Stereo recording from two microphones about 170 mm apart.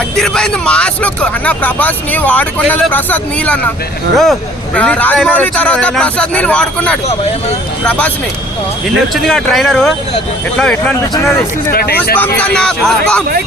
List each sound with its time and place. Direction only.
0.2 s speech: 5° left (ahead or behind)
9.2 s speech: centre (ahead or behind)
11.7 s speech: 65° left (ahead or behind)
12.1 s speech: 10° left (ahead or behind)